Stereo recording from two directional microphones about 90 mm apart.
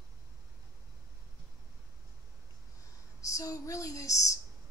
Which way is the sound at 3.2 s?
40° left (ahead or behind).